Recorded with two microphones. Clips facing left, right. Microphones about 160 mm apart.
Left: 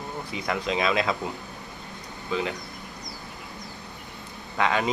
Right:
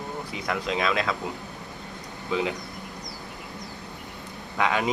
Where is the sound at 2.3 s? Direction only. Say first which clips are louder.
Right 2 dB; 15° right (ahead or behind).